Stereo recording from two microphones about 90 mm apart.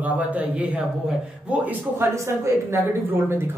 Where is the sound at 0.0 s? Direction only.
15° right (ahead or behind).